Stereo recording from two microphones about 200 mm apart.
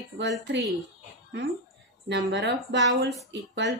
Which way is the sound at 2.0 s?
60° right (ahead or behind).